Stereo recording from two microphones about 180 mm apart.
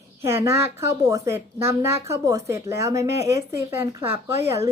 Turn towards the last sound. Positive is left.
turn(degrees=-15)  # may be behind; listen again after turning